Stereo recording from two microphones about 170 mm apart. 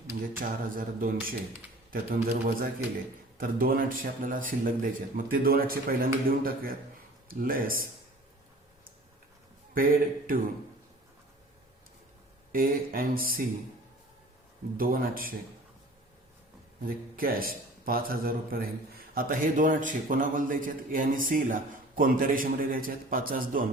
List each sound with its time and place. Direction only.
0.2 s a man's voice: 55° right (ahead or behind)
9.7 s a man's voice: 55° right (ahead or behind)
12.5 s a man's voice: 55° right (ahead or behind)
14.8 s a man's voice: 60° right (ahead or behind)
16.8 s a man's voice: 60° right (ahead or behind)